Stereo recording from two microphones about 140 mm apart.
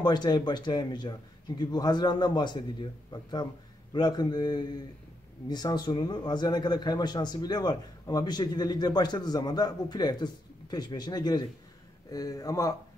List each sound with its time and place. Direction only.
0.0 s a man's voice: 30° left (ahead or behind)